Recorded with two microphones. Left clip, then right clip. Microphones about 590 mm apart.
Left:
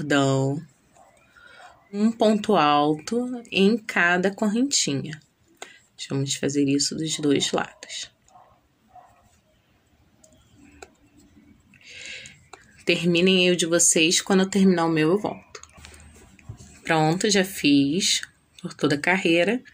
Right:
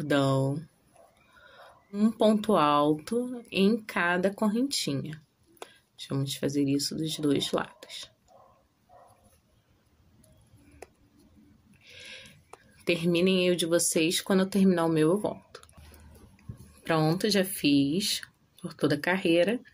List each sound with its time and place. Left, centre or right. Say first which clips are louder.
0.0 s speech: left 4 dB; right
11.8 s a sound: left 7 dB; right
12.8 s speech: left 5 dB; right